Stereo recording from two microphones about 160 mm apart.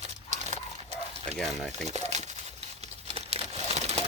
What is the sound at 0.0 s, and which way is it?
Dog, 45° right (ahead or behind).